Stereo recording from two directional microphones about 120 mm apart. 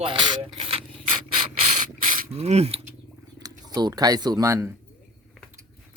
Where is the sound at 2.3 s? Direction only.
60° right (ahead or behind).